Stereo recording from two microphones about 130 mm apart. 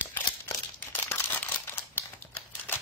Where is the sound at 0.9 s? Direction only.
15° left (ahead or behind).